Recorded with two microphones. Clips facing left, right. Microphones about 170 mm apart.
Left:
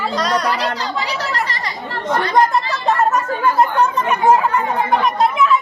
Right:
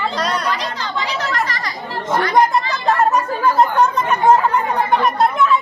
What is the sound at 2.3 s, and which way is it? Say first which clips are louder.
Speech: even; centre (ahead or behind).